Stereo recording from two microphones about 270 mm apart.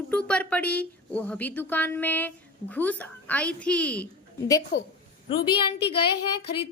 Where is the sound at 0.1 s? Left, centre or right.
Centre.